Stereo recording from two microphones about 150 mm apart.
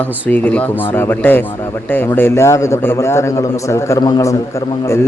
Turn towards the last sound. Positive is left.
turn(degrees=20)  # may be behind; listen again after turning